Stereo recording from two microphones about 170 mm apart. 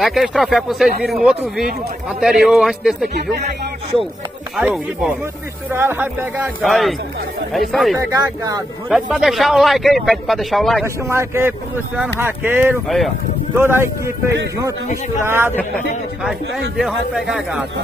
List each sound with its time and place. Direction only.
0.0 s speech: centre (ahead or behind)
3.2 s speech: 75° right (ahead or behind)
4.6 s speech: 5° right (ahead or behind)
6.6 s speech: centre (ahead or behind)
8.1 s speech: 20° right (ahead or behind)
8.8 s speech: 5° right (ahead or behind)
11.1 s speech: 15° right (ahead or behind)
12.8 s speech: centre (ahead or behind)
13.6 s speech: 15° right (ahead or behind)
16.7 s speech: centre (ahead or behind)